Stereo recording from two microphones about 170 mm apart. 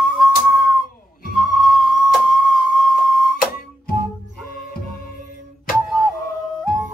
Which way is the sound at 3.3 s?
60° left (ahead or behind).